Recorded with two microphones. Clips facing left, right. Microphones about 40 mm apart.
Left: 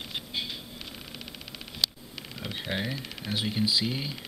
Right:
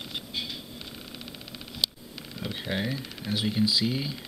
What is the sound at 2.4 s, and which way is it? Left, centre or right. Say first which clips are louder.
Speech: right 2 dB; centre.